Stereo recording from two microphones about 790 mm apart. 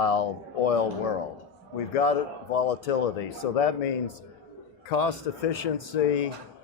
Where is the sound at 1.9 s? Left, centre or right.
Left.